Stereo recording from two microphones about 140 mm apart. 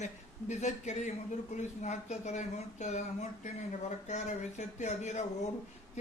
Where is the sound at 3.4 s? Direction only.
55° left (ahead or behind).